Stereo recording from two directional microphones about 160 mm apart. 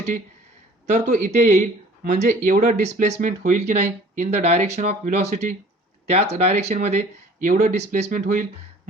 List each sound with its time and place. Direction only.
0.9 s speech: 50° right (ahead or behind)